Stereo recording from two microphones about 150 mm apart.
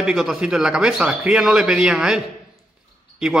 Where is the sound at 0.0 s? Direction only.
Centre (ahead or behind).